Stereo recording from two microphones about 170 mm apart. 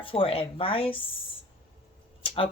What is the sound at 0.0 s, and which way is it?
Speech, 30° left (ahead or behind).